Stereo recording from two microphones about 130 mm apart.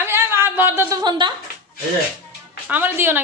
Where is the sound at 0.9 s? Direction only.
35° right (ahead or behind).